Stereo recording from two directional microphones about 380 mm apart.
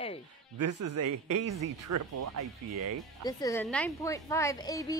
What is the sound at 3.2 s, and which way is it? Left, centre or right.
A woman's voice, centre.